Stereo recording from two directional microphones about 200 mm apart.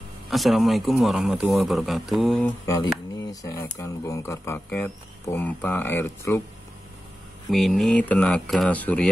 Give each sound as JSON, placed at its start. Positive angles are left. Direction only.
{"t": 0.3, "sound": "speech", "side_deg": 0}
{"t": 2.6, "sound": "speech", "side_deg": 15}
{"t": 7.4, "sound": "speech", "side_deg": 0}